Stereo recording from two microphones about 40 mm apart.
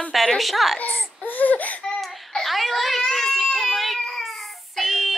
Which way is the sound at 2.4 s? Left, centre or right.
Centre.